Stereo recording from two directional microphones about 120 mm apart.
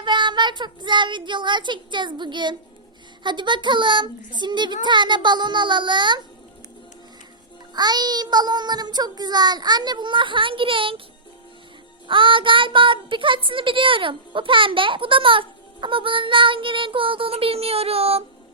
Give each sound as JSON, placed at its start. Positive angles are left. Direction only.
{"t": 0.0, "sound": "child singing", "side_deg": -40}
{"t": 7.7, "sound": "child singing", "side_deg": -35}
{"t": 12.0, "sound": "speech", "side_deg": -45}